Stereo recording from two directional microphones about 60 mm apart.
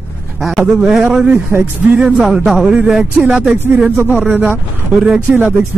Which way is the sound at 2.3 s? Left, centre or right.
Centre.